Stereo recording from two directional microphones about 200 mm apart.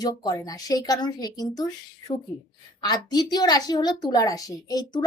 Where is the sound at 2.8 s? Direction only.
20° left (ahead or behind).